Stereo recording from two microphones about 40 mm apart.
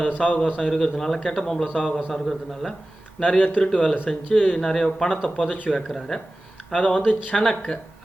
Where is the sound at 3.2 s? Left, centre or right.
Left.